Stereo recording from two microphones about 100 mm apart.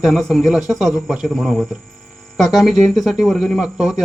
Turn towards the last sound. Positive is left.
turn(degrees=-5)  # may be behind; listen again after turning